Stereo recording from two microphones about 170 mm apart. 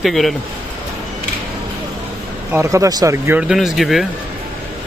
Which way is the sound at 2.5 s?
15° right (ahead or behind).